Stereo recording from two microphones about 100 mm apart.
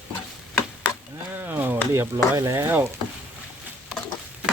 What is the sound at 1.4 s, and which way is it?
Speech, 20° right (ahead or behind).